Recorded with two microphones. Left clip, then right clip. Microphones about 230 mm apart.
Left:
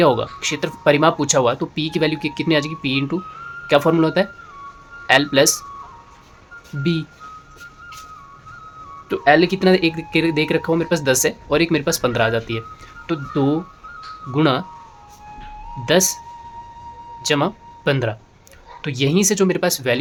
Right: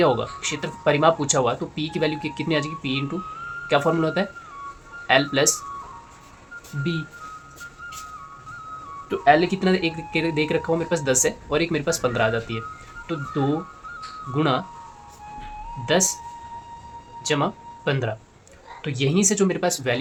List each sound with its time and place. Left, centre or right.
0.0 s speech: left
9.0 s speech: left
15.9 s speech: left
17.2 s speech: left